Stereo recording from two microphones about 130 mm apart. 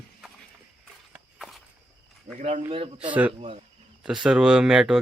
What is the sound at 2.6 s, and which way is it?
Speech, 45° right (ahead or behind).